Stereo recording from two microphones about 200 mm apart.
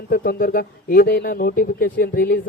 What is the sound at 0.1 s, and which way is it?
A man's voice, 50° left (ahead or behind).